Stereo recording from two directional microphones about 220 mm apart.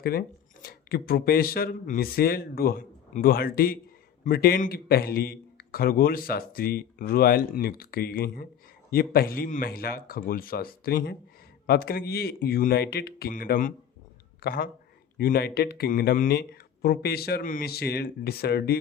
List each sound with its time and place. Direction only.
0.0 s a man's voice: 45° left (ahead or behind)